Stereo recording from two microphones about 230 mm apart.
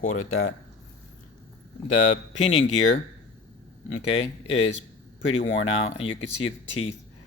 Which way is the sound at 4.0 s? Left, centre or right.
Left.